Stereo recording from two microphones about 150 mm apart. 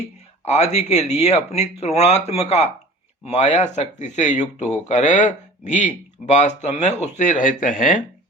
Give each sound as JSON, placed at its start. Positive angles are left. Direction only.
{"t": 0.4, "sound": "speech", "side_deg": 45}